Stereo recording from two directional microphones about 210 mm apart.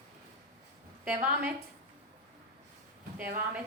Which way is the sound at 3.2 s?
45° right (ahead or behind).